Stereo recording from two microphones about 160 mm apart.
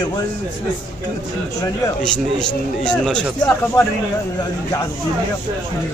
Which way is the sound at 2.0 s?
5° left (ahead or behind).